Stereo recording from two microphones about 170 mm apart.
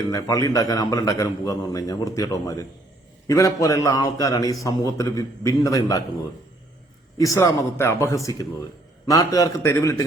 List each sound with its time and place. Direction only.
0.1 s a man's voice: 20° left (ahead or behind)
7.2 s a man's voice: 20° left (ahead or behind)